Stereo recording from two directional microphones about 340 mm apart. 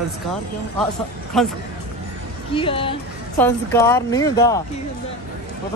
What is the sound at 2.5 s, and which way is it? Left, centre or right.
Speech, centre.